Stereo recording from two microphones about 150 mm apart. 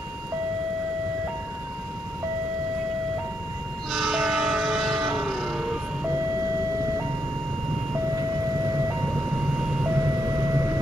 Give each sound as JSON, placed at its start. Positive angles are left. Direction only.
{"t": 3.9, "sound": "music", "side_deg": 0}
{"t": 9.1, "sound": "vehicle", "side_deg": -5}
{"t": 10.0, "sound": "vehicle", "side_deg": -20}